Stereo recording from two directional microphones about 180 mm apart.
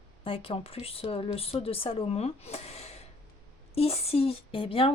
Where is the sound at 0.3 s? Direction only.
30° left (ahead or behind).